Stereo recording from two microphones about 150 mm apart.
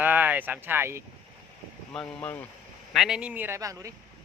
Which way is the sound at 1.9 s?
5° left (ahead or behind).